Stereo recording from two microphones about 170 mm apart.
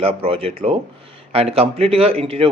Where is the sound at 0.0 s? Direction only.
35° right (ahead or behind).